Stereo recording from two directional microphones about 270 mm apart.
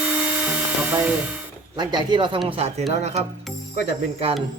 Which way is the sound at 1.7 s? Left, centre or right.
Centre.